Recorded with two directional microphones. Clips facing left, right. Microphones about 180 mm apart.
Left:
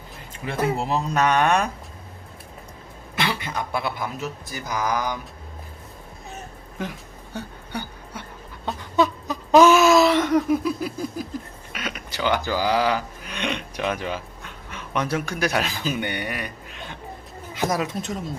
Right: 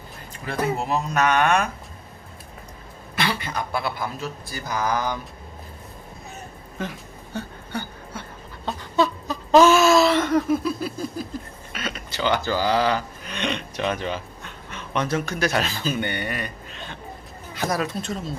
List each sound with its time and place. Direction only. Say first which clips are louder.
0.9 s speech: even; 30° left (ahead or behind)
3.2 s a man's voice: even; 20° left (ahead or behind)
7.3 s a sound: right 1 dB; 15° left (ahead or behind)
11.7 s speech: right 1 dB; 10° left (ahead or behind)